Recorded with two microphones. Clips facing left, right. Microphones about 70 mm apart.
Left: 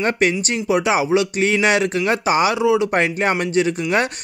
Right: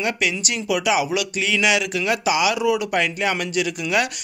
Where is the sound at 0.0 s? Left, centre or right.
Left.